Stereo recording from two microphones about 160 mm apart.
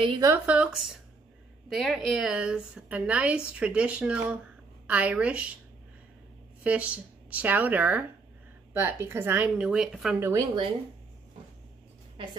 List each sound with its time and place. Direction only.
0.1 s speech: 20° right (ahead or behind)
0.5 s a woman's voice: 5° right (ahead or behind)
6.6 s a woman's voice: 10° right (ahead or behind)